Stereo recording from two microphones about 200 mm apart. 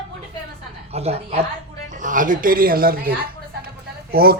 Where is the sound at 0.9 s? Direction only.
30° right (ahead or behind); by 3.1 s 50° right (ahead or behind).